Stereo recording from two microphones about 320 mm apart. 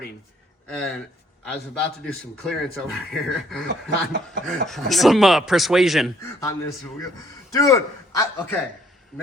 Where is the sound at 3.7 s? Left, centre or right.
Right.